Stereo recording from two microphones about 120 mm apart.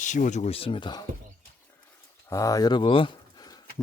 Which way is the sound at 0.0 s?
90° left.